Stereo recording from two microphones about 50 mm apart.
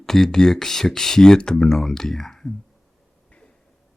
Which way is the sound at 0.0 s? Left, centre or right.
Centre.